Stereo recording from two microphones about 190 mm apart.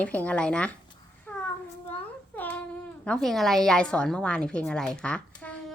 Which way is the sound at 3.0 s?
5° left (ahead or behind).